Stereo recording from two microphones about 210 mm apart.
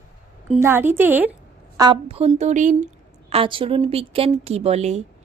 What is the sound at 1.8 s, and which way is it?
A woman's voice, 25° right (ahead or behind).